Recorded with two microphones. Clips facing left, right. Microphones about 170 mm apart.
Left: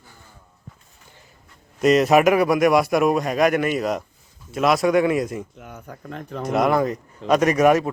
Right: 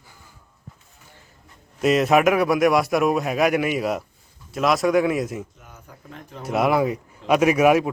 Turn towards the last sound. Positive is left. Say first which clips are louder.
# even
turn(degrees=-10)  # may be behind; listen again after turning